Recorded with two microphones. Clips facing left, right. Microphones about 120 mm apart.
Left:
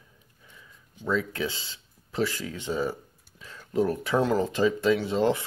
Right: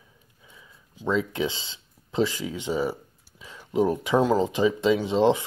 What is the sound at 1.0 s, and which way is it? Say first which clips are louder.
Speech: right 3 dB; 20° right (ahead or behind).